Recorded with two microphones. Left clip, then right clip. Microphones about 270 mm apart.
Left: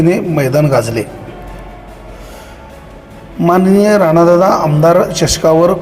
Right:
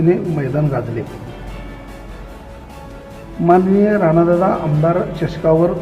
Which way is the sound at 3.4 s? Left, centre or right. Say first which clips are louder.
Left 3 dB; centre.